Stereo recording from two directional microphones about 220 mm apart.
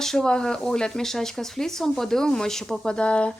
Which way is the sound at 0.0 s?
Centre (ahead or behind).